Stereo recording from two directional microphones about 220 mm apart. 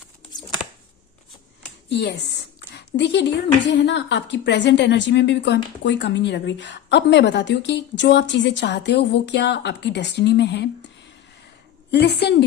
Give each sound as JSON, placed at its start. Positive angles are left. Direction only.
{"t": 1.9, "sound": "speech", "side_deg": 50}
{"t": 11.9, "sound": "speech", "side_deg": 50}